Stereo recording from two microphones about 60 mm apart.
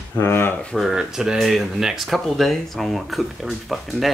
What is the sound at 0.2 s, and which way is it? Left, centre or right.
Speech, left.